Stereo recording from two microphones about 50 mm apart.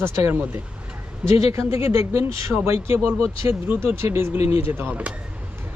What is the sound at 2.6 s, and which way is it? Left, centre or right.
Speech, right.